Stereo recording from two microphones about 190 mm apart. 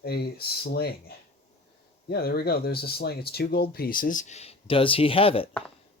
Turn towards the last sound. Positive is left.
turn(degrees=30)  # may be behind; listen again after turning